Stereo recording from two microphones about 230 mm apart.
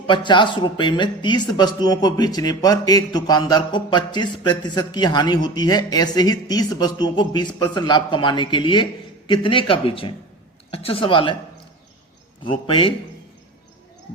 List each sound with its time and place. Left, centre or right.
0.1 s speech: centre
12.5 s speech: left